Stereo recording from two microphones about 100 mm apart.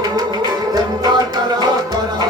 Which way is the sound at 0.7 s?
45° right (ahead or behind).